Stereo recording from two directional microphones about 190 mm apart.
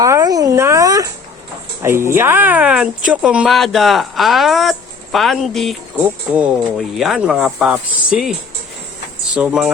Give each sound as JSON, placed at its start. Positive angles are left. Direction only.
{"t": 0.0, "sound": "speech", "side_deg": -20}